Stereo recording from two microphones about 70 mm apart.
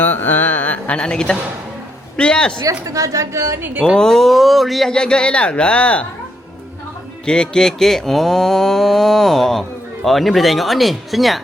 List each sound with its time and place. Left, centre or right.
0.0 s a sound: left
2.1 s speech: centre
2.8 s speech: right
3.9 s speech: centre
4.9 s speech: centre
7.3 s speech: centre